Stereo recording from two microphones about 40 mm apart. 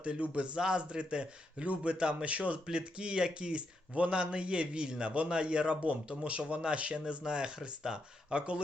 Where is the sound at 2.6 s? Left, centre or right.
Right.